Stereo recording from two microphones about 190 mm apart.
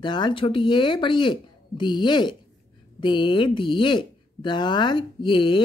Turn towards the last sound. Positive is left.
turn(degrees=25)  # may be behind; listen again after turning